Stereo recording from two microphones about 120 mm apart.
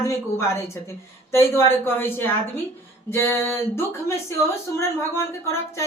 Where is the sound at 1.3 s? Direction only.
20° left (ahead or behind).